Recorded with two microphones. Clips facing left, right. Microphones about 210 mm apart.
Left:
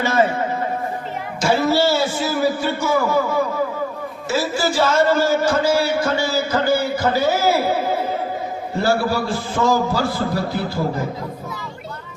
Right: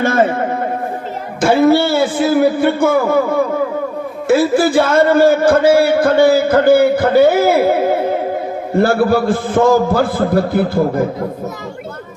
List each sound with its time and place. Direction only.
0.0 s a man's voice: 55° right (ahead or behind)